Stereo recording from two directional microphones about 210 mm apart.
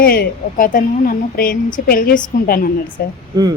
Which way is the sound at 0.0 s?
45° left (ahead or behind).